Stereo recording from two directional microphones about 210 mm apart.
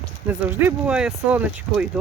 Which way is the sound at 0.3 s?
5° right (ahead or behind).